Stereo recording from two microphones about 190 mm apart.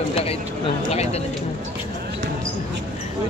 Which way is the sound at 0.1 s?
30° left (ahead or behind).